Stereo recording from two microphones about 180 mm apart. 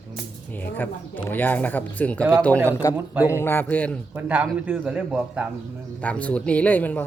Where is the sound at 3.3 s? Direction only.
15° left (ahead or behind).